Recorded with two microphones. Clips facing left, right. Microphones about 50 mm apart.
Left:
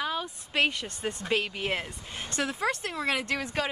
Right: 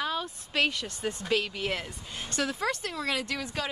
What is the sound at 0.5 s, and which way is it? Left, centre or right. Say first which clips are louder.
Speech: left 1 dB; left.